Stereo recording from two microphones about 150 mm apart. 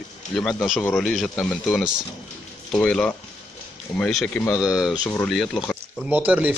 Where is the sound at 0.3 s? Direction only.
Centre (ahead or behind).